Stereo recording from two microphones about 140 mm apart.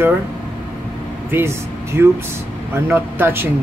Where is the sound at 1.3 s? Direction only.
15° right (ahead or behind).